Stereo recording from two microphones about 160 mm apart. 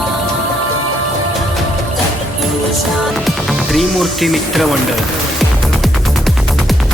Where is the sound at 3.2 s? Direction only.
Centre (ahead or behind).